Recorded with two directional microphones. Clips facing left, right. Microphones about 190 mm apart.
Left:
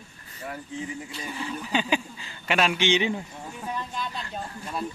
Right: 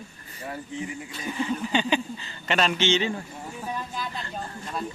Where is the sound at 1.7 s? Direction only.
5° left (ahead or behind).